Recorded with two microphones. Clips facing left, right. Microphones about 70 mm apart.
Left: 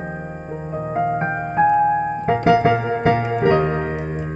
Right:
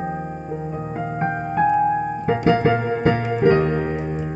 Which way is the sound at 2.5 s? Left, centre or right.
Centre.